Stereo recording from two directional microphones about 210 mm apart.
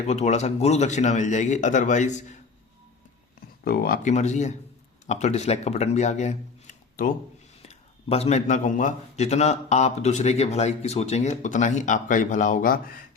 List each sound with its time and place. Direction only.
0.1 s a man's voice: 30° left (ahead or behind)
3.6 s a man's voice: 45° left (ahead or behind)